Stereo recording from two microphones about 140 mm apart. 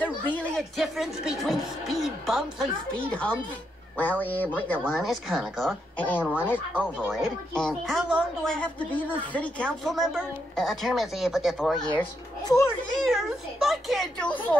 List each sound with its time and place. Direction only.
0.0 s a woman's voice: 5° left (ahead or behind)
2.9 s a woman's voice: 10° left (ahead or behind)
5.9 s speech: 10° left (ahead or behind)
7.1 s a woman's voice: centre (ahead or behind)
8.5 s speech: 10° left (ahead or behind)
9.8 s a woman's voice: centre (ahead or behind)
12.4 s a child's voice: 20° left (ahead or behind)
13.0 s a woman's voice: centre (ahead or behind)